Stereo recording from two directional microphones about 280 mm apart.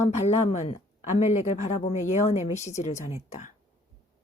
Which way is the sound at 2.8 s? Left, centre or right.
Left.